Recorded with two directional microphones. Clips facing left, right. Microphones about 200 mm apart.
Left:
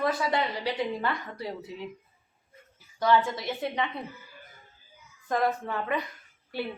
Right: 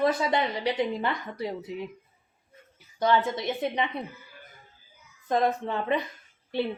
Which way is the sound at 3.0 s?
20° right (ahead or behind).